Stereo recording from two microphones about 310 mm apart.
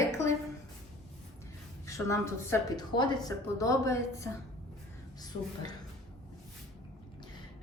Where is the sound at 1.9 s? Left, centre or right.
Centre.